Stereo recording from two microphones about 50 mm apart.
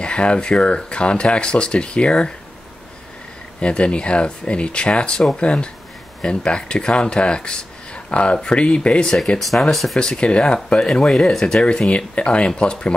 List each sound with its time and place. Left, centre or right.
0.0 s speech: left
3.6 s speech: left
9.4 s speech: centre
9.9 s speech: centre